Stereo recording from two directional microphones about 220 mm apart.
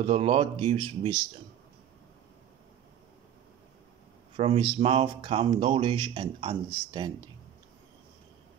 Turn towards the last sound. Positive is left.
turn(degrees=-20)  # may be behind; listen again after turning